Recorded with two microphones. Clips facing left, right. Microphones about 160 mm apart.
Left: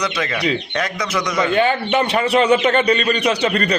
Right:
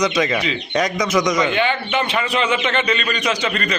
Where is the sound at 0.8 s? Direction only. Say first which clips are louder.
Right 4 dB; 15° right (ahead or behind).